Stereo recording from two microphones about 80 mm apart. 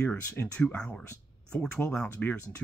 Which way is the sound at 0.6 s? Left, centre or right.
Centre.